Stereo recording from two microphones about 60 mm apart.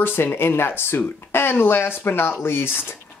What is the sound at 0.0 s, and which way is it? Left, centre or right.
Speech, left.